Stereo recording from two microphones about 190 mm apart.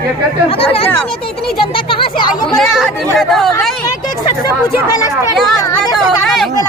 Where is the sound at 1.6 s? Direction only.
25° left (ahead or behind).